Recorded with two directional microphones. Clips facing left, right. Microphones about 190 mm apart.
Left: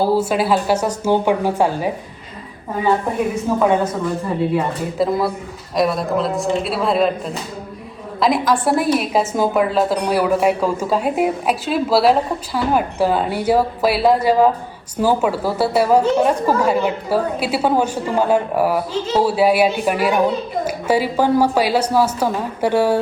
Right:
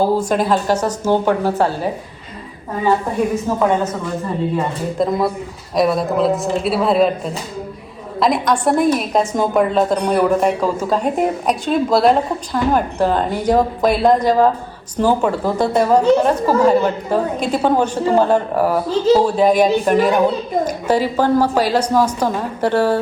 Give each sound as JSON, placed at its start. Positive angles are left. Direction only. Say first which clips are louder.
{"t": 0.0, "sound": "a woman's voice", "louder": "right 1 dB", "side_deg": 5}
{"t": 3.5, "sound": "a woman's voice", "louder": "left 1 dB", "side_deg": 15}
{"t": 4.5, "sound": "a woman's voice", "louder": "even", "side_deg": 5}
{"t": 8.2, "sound": "a woman's voice", "louder": "right 1 dB", "side_deg": 0}